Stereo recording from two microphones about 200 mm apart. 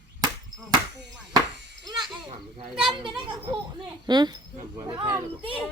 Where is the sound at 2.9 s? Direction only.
25° right (ahead or behind).